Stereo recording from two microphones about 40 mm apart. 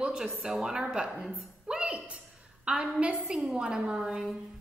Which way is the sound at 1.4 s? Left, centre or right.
Right.